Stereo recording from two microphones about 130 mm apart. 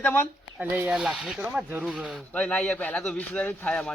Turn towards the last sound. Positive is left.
turn(degrees=5)  # may be behind; listen again after turning